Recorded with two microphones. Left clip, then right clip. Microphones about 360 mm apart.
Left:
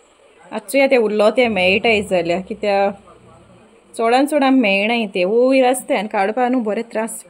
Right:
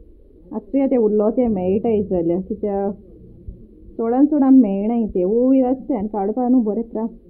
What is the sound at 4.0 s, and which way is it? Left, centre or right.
A woman's voice, centre.